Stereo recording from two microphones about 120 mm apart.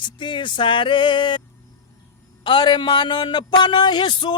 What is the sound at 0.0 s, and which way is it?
A man's voice, 40° left (ahead or behind).